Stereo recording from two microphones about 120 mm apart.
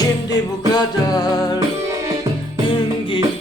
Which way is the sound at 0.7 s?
35° left (ahead or behind).